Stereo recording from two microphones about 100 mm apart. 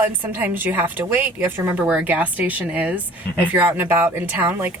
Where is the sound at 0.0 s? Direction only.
20° right (ahead or behind).